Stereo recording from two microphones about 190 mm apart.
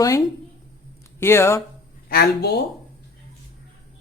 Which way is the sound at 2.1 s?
55° left (ahead or behind).